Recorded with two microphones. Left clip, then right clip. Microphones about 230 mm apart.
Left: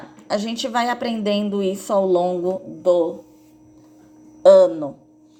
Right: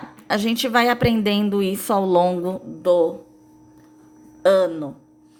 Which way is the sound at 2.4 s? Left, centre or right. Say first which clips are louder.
Left 3 dB; centre.